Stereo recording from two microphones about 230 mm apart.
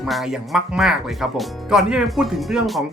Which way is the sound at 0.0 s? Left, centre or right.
Centre.